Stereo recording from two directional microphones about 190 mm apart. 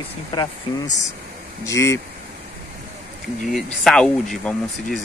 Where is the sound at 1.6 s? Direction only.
15° left (ahead or behind).